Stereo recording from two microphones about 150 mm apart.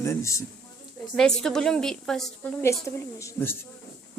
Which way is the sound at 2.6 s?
20° left (ahead or behind).